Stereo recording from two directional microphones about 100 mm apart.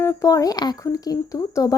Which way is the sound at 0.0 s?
35° left (ahead or behind).